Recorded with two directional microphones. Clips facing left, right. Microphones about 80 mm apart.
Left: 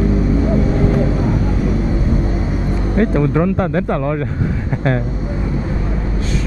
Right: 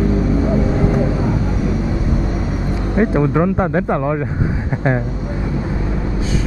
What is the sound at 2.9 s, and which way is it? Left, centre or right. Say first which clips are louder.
Speech: even; centre.